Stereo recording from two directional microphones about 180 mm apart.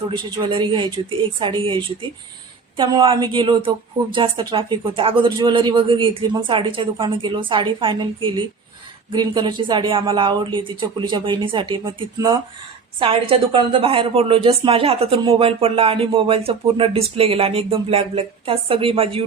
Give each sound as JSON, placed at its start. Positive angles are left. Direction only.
{"t": 0.1, "sound": "a woman's voice", "side_deg": -30}